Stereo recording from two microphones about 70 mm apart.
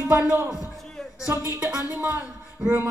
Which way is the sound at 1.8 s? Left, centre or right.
Right.